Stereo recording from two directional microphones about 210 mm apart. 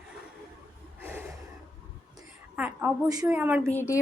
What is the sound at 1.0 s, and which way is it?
Gasp, 10° right (ahead or behind).